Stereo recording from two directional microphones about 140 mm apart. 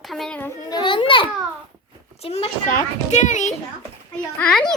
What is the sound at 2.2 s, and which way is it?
Speech, 45° left (ahead or behind).